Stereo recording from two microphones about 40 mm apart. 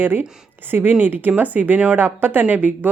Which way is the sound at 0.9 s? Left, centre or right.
Right.